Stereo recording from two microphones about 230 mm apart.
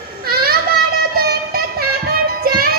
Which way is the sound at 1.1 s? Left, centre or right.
Right.